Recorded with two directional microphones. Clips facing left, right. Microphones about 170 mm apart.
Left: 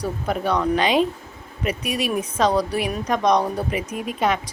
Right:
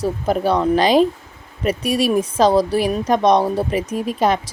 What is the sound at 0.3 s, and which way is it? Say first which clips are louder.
Speech: right 4 dB; 30° right (ahead or behind).